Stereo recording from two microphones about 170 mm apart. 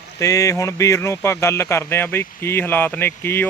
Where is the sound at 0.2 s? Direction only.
20° left (ahead or behind).